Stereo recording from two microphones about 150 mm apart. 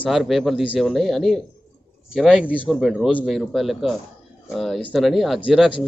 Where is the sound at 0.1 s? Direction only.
Centre (ahead or behind).